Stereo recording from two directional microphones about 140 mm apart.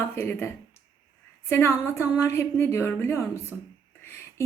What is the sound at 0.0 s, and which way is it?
A woman's voice, 15° left (ahead or behind).